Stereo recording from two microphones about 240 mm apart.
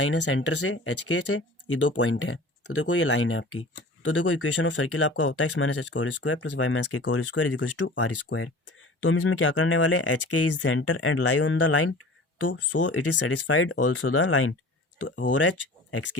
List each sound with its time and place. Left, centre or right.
0.0 s speech: left
1.6 s speech: left
3.8 s speech: left
5.5 s speech: left
6.8 s speech: left
10.5 s speech: left
12.5 s speech: left
12.9 s speech: left
13.3 s speech: left